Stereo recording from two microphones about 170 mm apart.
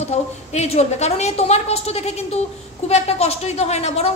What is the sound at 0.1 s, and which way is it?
A woman's voice, 40° left (ahead or behind).